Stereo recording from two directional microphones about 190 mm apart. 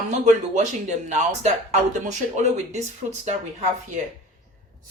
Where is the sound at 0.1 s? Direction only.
35° right (ahead or behind).